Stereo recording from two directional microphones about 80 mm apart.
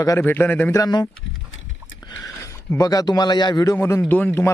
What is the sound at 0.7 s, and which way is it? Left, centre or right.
Speech, left.